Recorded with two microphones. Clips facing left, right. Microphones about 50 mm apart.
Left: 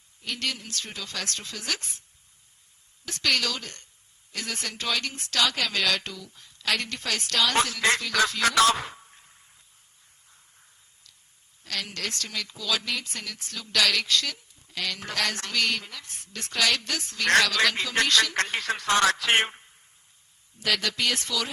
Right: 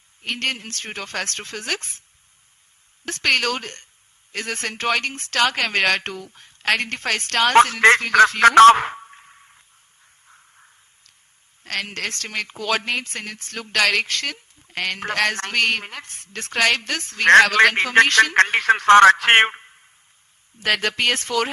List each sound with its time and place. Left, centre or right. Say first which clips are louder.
0.2 s speech: right 6 dB; right
3.1 s speech: right 6 dB; right
11.6 s speech: right 6 dB; right